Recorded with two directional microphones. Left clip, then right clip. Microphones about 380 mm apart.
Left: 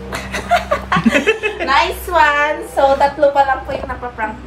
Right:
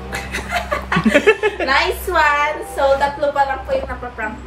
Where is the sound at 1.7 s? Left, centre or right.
Centre.